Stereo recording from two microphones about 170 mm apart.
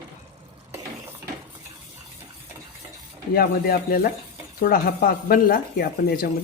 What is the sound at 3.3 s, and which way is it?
Speech, 60° left (ahead or behind).